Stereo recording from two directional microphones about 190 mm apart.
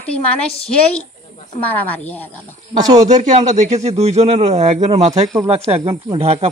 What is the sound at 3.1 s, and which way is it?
Speech, 40° right (ahead or behind).